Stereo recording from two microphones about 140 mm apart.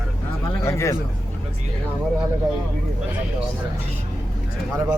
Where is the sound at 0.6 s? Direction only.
20° left (ahead or behind).